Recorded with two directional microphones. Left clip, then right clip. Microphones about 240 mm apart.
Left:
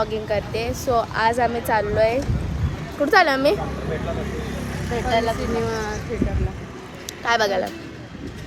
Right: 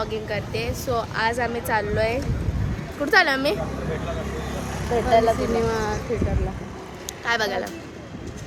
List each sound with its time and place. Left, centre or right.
0.0 s speech: centre
4.7 s speech: right
5.7 s speech: centre
7.3 s speech: centre